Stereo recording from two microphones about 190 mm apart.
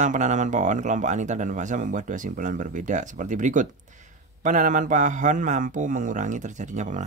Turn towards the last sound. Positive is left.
turn(degrees=-40)  # may be behind; listen again after turning